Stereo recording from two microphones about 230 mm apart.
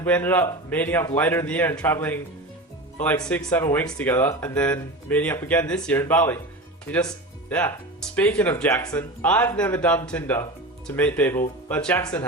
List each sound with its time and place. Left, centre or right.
0.0 s speech: centre
3.2 s speech: centre